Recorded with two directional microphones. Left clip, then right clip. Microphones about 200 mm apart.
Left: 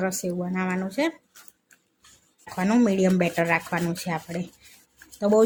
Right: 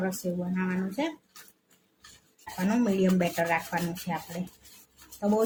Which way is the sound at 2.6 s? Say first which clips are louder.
Left 5 dB; 40° left (ahead or behind).